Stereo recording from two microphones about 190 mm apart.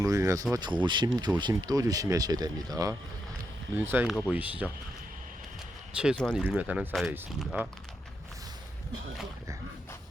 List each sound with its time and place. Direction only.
0.0 s speech: 15° right (ahead or behind)
6.0 s speech: centre (ahead or behind)